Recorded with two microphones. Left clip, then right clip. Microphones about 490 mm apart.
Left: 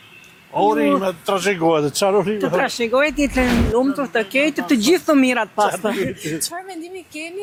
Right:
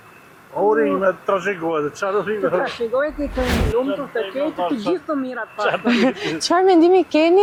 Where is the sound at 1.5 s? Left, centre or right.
Left.